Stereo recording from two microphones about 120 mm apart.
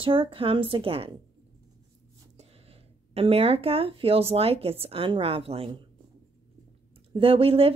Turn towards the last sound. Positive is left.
turn(degrees=-50)  # may be behind; listen again after turning